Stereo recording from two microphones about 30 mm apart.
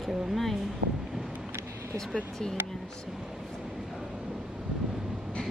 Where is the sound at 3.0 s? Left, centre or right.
Centre.